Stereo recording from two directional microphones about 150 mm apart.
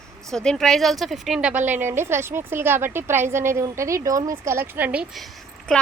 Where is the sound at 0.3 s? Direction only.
5° left (ahead or behind).